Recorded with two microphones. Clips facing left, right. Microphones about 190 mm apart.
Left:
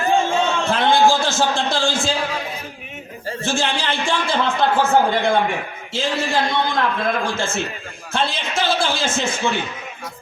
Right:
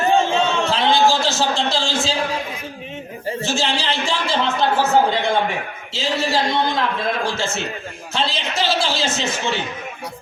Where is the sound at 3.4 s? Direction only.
55° left (ahead or behind).